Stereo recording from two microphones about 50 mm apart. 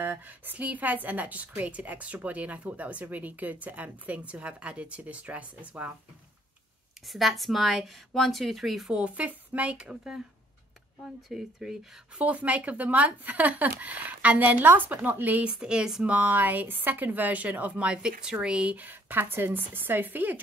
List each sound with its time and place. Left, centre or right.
0.0 s a woman's voice: right
0.6 s speech: right
7.1 s a woman's voice: centre
8.9 s speech: right
11.3 s speech: centre
12.2 s speech: right
15.4 s speech: centre
16.1 s speech: right
17.8 s speech: centre
18.8 s speech: right